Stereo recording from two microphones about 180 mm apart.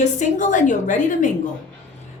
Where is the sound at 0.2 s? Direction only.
45° left (ahead or behind).